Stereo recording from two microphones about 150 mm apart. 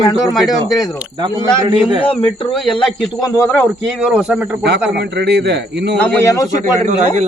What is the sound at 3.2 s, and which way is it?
Speech, 20° left (ahead or behind).